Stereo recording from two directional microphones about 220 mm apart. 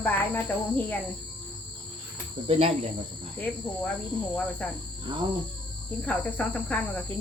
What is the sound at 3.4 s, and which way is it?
Cricket, 5° left (ahead or behind).